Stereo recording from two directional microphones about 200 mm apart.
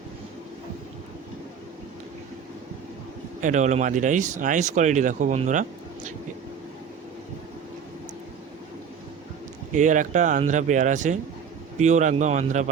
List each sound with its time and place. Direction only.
3.4 s speech: 35° right (ahead or behind)
9.7 s speech: 40° right (ahead or behind)